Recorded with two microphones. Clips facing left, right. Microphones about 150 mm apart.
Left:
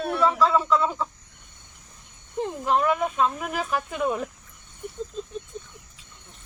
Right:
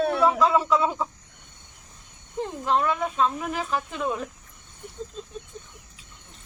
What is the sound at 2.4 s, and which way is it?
Speech, 15° left (ahead or behind).